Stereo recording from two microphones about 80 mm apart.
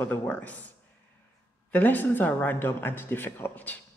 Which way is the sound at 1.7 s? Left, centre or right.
Left.